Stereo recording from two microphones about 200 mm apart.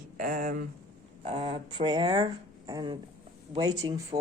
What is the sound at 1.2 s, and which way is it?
Speech, 30° right (ahead or behind).